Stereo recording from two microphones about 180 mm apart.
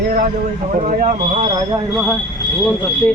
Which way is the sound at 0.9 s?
45° right (ahead or behind).